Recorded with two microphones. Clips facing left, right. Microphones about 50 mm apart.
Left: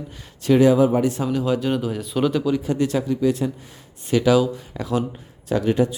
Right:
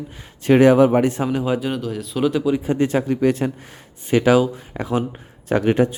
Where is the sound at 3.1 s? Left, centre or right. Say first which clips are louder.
Right 2 dB; right.